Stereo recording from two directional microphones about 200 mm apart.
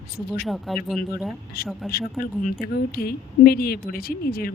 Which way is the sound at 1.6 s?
50° left (ahead or behind).